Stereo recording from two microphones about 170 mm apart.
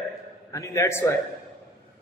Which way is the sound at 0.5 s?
20° left (ahead or behind).